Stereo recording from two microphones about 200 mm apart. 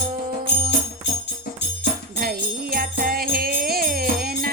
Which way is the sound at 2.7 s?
45° right (ahead or behind).